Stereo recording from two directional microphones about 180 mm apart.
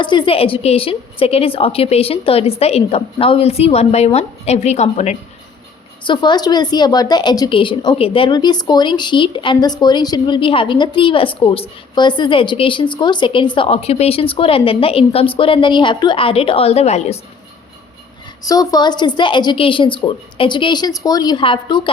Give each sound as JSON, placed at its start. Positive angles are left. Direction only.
{"t": 0.0, "sound": "a woman's voice", "side_deg": 25}
{"t": 6.1, "sound": "a woman's voice", "side_deg": 25}
{"t": 18.4, "sound": "a woman's voice", "side_deg": 20}